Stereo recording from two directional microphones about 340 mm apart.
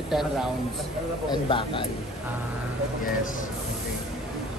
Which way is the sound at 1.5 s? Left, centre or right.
Centre.